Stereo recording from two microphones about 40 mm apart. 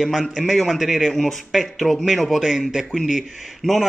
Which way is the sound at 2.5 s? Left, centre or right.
Centre.